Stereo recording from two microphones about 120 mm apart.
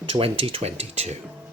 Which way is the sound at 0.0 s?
50° right (ahead or behind).